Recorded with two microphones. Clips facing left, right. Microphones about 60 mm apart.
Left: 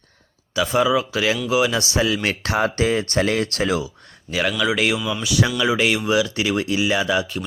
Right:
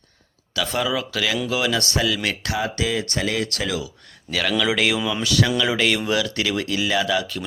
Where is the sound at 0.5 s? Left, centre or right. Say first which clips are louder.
Left 5 dB; centre.